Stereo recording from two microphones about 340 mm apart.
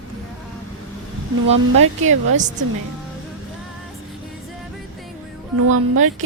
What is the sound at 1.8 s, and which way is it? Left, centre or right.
Speech, right.